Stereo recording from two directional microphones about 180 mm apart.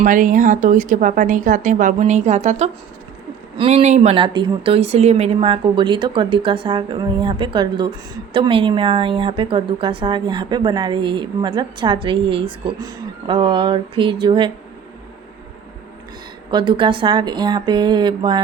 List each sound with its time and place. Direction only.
0.0 s a woman's voice: 45° right (ahead or behind); by 14.5 s 30° right (ahead or behind)
16.5 s speech: 25° right (ahead or behind)